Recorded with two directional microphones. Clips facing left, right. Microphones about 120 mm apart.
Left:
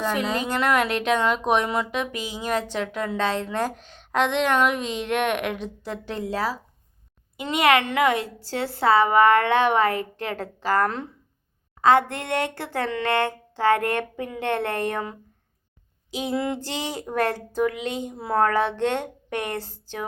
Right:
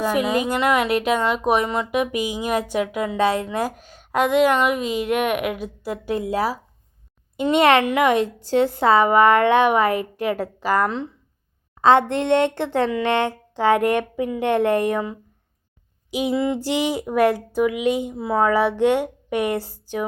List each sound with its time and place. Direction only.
0.0 s a woman's voice: 10° right (ahead or behind)
1.9 s a woman's voice: 15° right (ahead or behind)
7.3 s a woman's voice: 30° right (ahead or behind)
10.8 s speech: centre (ahead or behind)
11.8 s a woman's voice: 25° right (ahead or behind)
16.1 s a woman's voice: 15° right (ahead or behind)
18.1 s a woman's voice: centre (ahead or behind)